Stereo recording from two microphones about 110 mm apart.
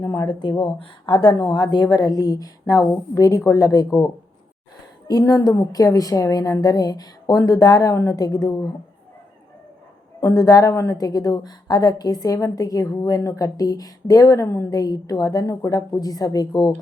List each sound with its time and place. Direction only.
0.0 s a woman's voice: 35° left (ahead or behind)
5.0 s a woman's voice: 35° left (ahead or behind)
10.2 s a woman's voice: 30° left (ahead or behind)